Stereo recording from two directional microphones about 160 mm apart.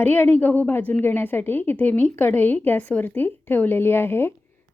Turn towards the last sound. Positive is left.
turn(degrees=15)  # may be behind; listen again after turning